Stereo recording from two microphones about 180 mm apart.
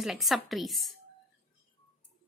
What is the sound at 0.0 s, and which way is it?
Speech, centre (ahead or behind).